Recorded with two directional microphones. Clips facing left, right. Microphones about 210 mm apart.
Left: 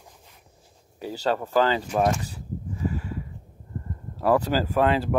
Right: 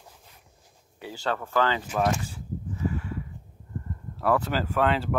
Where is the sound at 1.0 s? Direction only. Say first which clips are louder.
Left 6 dB; 40° left (ahead or behind).